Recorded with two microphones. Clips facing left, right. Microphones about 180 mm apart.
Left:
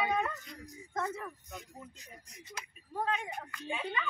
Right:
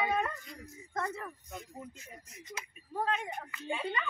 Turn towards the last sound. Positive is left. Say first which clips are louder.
# right 2 dB
turn(degrees=-5)  # may be behind; listen again after turning